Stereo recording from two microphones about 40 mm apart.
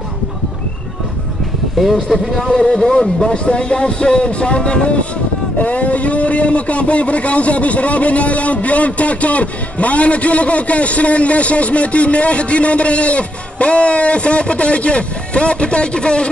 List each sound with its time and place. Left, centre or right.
1.8 s speech: centre
2.4 s speech: centre